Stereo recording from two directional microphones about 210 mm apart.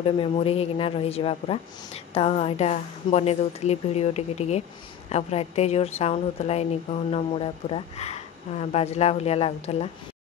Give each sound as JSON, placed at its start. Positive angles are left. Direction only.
{"t": 0.0, "sound": "a woman's voice", "side_deg": 25}